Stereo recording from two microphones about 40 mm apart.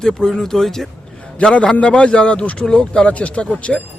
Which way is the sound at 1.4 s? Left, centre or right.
Left.